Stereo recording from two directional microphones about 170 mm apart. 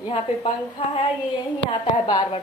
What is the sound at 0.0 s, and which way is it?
A woman's voice, 30° left (ahead or behind).